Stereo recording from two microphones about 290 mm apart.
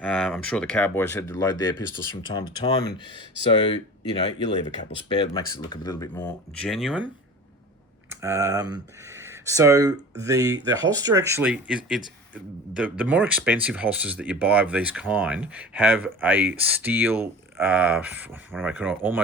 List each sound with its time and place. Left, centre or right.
0.0 s speech: centre
8.1 s speech: centre